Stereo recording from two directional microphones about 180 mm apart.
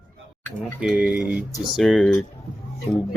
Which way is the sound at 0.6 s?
5° right (ahead or behind).